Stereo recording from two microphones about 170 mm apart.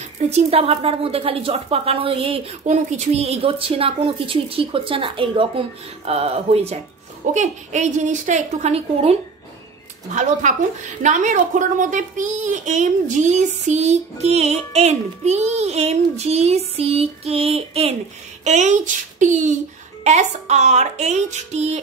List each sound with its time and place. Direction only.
0.3 s a child's voice: 40° right (ahead or behind)